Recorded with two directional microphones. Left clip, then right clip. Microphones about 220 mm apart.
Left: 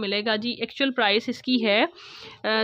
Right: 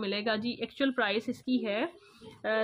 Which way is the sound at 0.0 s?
25° left (ahead or behind).